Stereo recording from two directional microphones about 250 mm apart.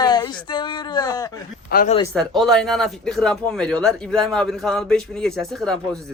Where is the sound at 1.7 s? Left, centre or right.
Left.